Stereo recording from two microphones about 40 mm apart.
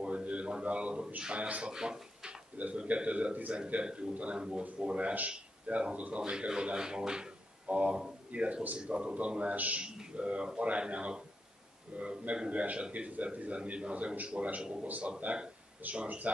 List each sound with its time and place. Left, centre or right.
0.0 s a sound: right
1.3 s speech: right
1.7 s speech: centre
2.5 s speech: right
2.8 s a man's voice: right